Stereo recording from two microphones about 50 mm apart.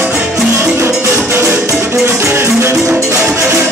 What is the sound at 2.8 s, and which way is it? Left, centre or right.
Music, right.